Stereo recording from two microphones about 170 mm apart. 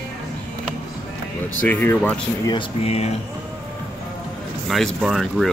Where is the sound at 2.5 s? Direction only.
35° left (ahead or behind).